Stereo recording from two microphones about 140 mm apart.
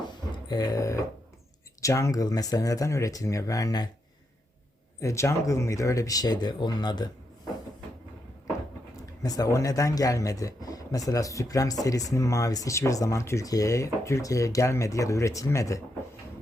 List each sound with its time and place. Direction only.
0.0 s a sound: 30° left (ahead or behind)
1.8 s speech: 20° left (ahead or behind)
4.9 s speech: 20° left (ahead or behind)
9.2 s speech: 25° left (ahead or behind)